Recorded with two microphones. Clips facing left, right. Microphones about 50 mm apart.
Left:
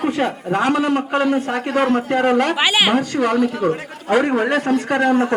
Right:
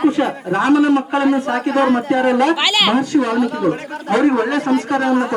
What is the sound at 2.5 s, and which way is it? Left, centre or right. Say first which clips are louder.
A man's voice: right 1 dB; centre.